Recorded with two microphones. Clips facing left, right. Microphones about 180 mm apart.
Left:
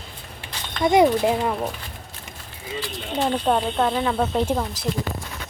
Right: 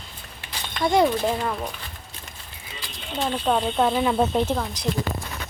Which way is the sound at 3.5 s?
10° left (ahead or behind).